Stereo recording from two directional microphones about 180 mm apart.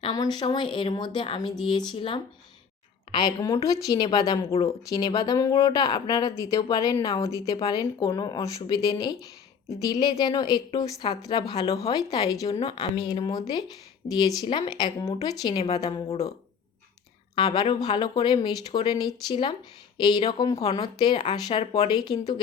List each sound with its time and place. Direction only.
0.0 s speech: 25° left (ahead or behind)
12.5 s speech: 35° left (ahead or behind)
13.0 s speech: 20° left (ahead or behind)
15.4 s speech: 35° left (ahead or behind)
17.3 s speech: 25° left (ahead or behind)